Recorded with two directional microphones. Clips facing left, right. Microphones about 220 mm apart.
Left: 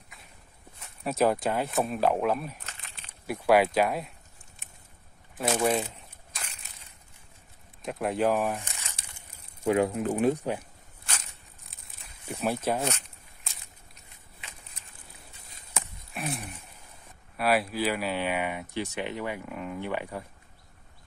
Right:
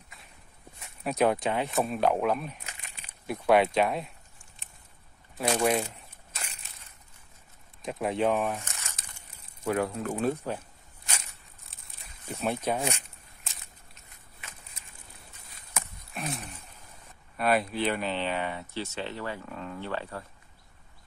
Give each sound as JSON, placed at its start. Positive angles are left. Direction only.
{"t": 0.1, "sound": "walk", "side_deg": 0}
{"t": 1.0, "sound": "speech", "side_deg": 0}
{"t": 5.4, "sound": "a sound", "side_deg": 0}
{"t": 7.8, "sound": "speech", "side_deg": 0}
{"t": 8.4, "sound": "crumpling", "side_deg": 15}
{"t": 9.7, "sound": "speech", "side_deg": 20}
{"t": 12.3, "sound": "speech", "side_deg": 5}
{"t": 12.8, "sound": "walk", "side_deg": -10}
{"t": 16.1, "sound": "a sound", "side_deg": 0}
{"t": 17.4, "sound": "speech", "side_deg": 5}